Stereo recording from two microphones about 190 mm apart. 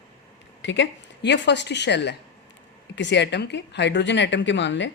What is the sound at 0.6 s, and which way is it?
A woman's voice, 70° left (ahead or behind).